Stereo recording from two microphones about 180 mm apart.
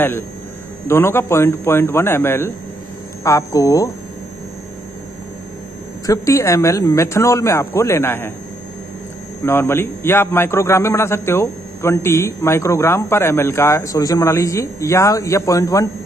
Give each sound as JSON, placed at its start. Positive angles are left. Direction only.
{"t": 0.8, "sound": "a man's voice", "side_deg": 15}
{"t": 6.0, "sound": "a man's voice", "side_deg": 15}
{"t": 9.4, "sound": "a man's voice", "side_deg": 15}